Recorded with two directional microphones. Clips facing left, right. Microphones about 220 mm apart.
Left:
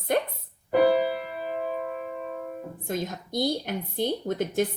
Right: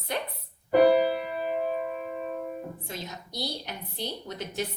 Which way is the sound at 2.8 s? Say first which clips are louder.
Left 8 dB; 50° left (ahead or behind).